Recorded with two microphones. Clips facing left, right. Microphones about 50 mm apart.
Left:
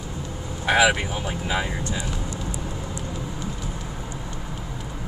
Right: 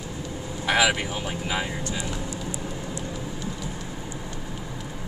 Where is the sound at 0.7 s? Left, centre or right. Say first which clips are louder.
Left 3 dB; left.